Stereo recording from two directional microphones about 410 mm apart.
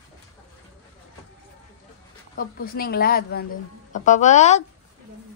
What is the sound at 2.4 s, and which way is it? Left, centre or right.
A woman's voice, left.